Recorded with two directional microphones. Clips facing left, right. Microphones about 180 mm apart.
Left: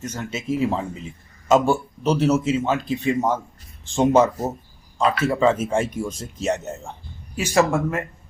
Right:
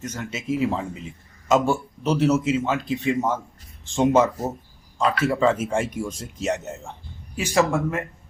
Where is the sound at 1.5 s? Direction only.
35° left (ahead or behind).